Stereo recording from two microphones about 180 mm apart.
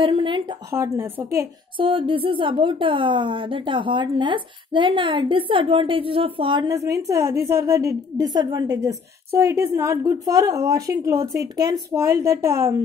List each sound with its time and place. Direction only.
0.0 s a sound: 30° right (ahead or behind)
0.7 s a woman's voice: 15° right (ahead or behind)
1.8 s a woman's voice: 30° right (ahead or behind)